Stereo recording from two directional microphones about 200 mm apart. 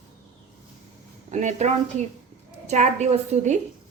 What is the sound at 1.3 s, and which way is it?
Speech, 35° right (ahead or behind).